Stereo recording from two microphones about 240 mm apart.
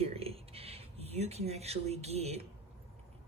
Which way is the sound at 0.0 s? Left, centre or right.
Right.